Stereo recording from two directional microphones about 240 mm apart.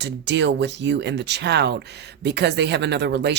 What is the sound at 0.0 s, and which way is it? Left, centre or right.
Speech, right.